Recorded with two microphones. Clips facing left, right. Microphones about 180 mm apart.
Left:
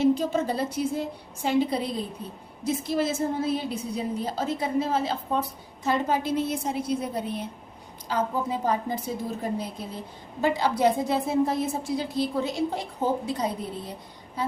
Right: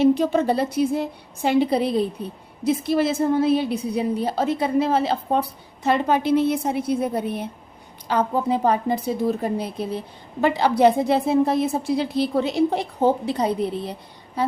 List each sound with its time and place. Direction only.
0.0 s a woman's voice: 65° right (ahead or behind)